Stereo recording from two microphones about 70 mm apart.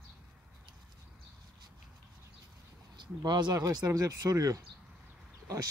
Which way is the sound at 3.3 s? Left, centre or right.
Right.